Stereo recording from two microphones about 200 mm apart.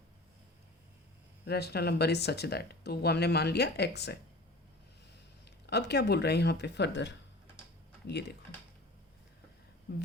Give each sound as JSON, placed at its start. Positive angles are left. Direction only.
{"t": 1.5, "sound": "speech", "side_deg": 55}
{"t": 5.6, "sound": "speech", "side_deg": 55}